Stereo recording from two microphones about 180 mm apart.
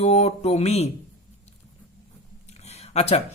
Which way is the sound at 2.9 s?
35° left (ahead or behind).